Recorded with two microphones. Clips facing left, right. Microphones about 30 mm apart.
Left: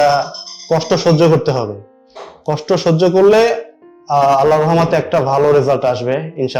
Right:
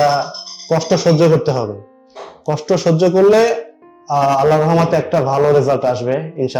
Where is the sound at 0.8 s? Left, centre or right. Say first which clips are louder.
Left 1 dB; left.